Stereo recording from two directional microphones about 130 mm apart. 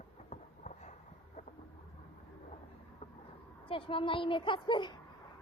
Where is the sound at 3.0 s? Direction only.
55° left (ahead or behind).